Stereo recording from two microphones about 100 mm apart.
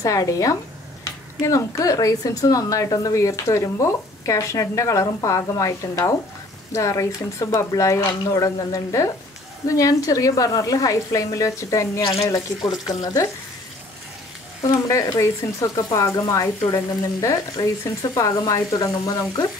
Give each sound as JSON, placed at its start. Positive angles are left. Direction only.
{"t": 0.0, "sound": "speech", "side_deg": 35}
{"t": 14.6, "sound": "speech", "side_deg": 35}